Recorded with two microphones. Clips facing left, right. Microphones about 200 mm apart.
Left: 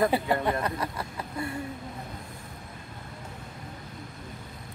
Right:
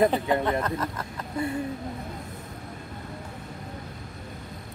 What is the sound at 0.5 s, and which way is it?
Speech, 10° left (ahead or behind).